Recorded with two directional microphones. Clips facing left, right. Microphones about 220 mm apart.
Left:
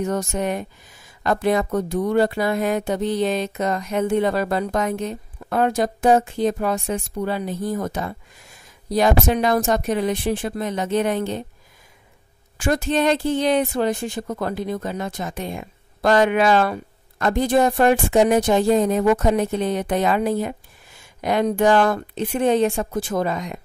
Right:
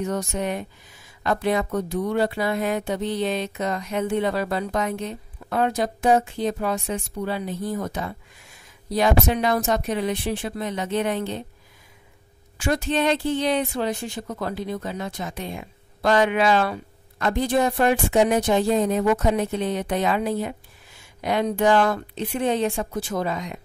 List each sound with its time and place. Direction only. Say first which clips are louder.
0.0 s speech: left 3 dB; 45° left (ahead or behind)
12.5 s speech: left 3 dB; 45° left (ahead or behind)